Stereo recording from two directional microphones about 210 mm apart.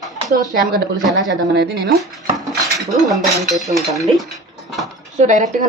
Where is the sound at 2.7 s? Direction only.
Centre (ahead or behind).